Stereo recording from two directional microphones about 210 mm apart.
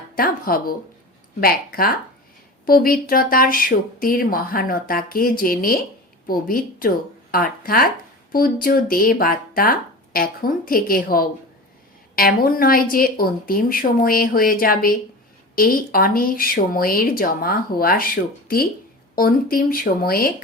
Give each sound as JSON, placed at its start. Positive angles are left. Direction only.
{"t": 0.2, "sound": "speech", "side_deg": 45}